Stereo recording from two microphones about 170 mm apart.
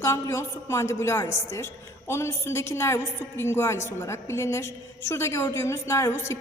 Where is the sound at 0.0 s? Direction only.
15° left (ahead or behind).